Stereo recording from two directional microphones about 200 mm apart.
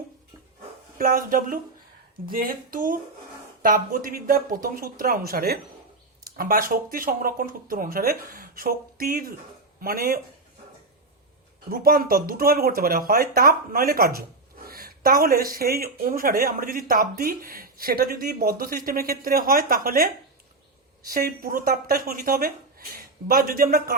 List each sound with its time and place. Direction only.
0.9 s speech: 45° right (ahead or behind)
11.7 s speech: 45° right (ahead or behind)
21.1 s speech: 45° right (ahead or behind)